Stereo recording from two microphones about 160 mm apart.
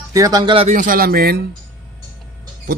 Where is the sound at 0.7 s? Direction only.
60° right (ahead or behind); by 1.4 s 75° right (ahead or behind).